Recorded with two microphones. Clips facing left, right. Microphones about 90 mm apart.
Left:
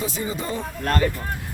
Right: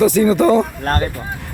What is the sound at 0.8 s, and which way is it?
Speech, 40° right (ahead or behind).